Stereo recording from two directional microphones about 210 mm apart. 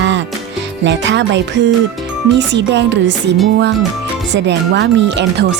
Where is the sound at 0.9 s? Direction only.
60° right (ahead or behind).